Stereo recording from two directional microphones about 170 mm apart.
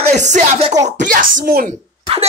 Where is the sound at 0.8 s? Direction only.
50° right (ahead or behind).